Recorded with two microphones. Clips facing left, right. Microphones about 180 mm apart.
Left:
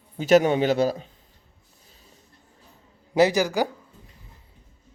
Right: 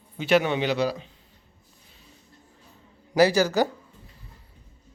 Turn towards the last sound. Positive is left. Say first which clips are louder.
# even
turn(degrees=15)  # may be behind; listen again after turning